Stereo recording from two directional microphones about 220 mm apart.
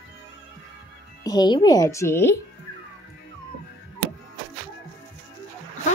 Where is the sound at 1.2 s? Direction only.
20° left (ahead or behind).